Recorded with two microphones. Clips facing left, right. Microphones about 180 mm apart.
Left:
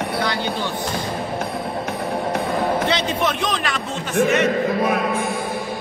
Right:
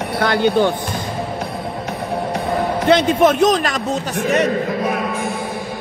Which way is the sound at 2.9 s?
50° right (ahead or behind).